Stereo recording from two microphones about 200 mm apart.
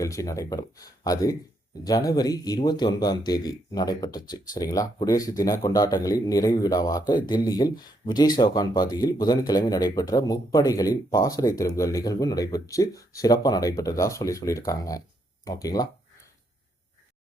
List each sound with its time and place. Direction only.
0.0 s speech: 15° left (ahead or behind)